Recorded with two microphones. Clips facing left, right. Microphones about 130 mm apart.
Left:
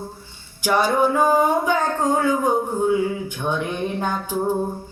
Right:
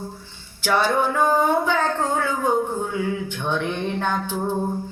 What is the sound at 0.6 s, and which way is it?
A woman's voice, 10° left (ahead or behind).